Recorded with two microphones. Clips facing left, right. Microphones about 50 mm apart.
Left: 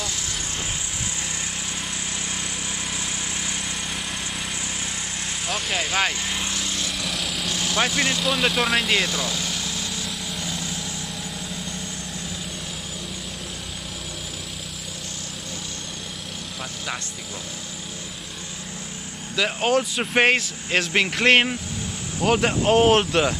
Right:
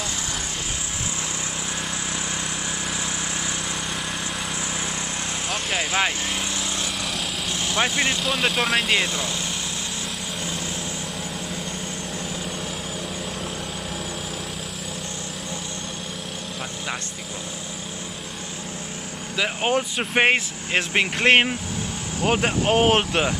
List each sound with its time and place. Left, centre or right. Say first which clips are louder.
5.5 s speech: even; centre
6.8 s lawn mower: even; centre
7.4 s vehicle: left 1 dB; right
7.8 s speech: even; centre
8.2 s speech: left 1 dB; centre
8.9 s speech: even; right
19.3 s speech: left 1 dB; centre